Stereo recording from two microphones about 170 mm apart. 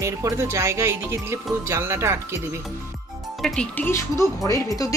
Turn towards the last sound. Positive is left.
turn(degrees=20)  # may be behind; listen again after turning